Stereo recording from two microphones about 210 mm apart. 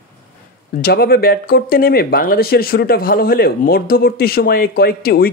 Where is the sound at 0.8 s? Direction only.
50° left (ahead or behind).